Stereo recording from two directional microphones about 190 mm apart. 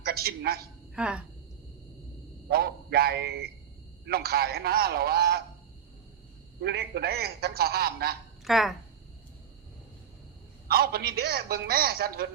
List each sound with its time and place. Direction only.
0.0 s a man's voice: 55° right (ahead or behind)
0.9 s a woman's voice: 5° right (ahead or behind)
2.5 s a man's voice: 55° right (ahead or behind)
6.6 s a man's voice: 60° right (ahead or behind)
8.4 s a woman's voice: centre (ahead or behind)
10.7 s a man's voice: 55° right (ahead or behind)